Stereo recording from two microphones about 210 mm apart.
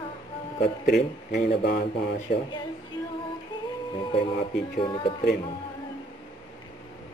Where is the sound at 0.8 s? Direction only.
50° left (ahead or behind).